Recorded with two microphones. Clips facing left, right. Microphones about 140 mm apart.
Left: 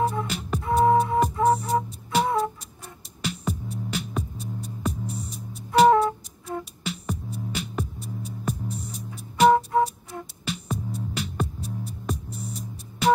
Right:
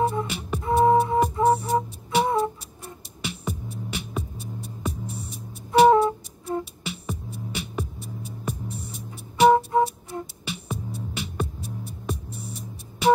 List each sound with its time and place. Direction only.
0.0 s flute: 20° right (ahead or behind)
0.3 s flute: centre (ahead or behind)
0.7 s music: centre (ahead or behind)
2.2 s music: 25° right (ahead or behind)
3.2 s music: centre (ahead or behind)
5.9 s music: 25° right (ahead or behind)
6.6 s music: centre (ahead or behind)
9.7 s music: 20° right (ahead or behind)
10.4 s music: centre (ahead or behind)